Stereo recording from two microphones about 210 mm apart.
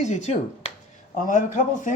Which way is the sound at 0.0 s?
35° left (ahead or behind).